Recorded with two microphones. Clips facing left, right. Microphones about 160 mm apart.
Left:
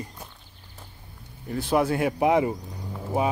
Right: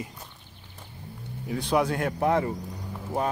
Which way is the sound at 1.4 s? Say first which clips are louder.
Left 1 dB; centre (ahead or behind).